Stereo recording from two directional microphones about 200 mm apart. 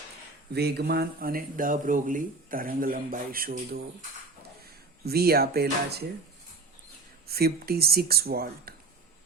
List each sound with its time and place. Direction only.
0.5 s speech: 55° right (ahead or behind)
5.0 s speech: 50° right (ahead or behind)
7.3 s speech: 50° right (ahead or behind)